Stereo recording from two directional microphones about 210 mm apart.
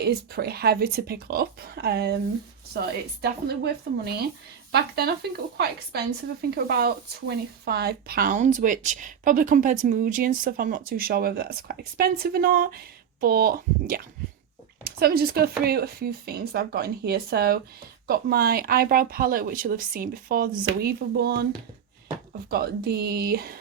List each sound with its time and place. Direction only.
0.0 s speech: 50° right (ahead or behind)
22.4 s speech: 45° right (ahead or behind)